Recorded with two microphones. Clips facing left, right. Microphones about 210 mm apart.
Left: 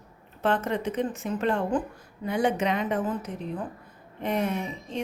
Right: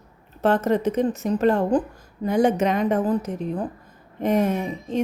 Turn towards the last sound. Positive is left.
turn(degrees=-40)  # may be behind; listen again after turning